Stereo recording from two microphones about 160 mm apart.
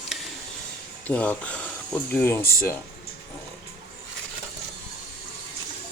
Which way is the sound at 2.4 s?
65° left (ahead or behind).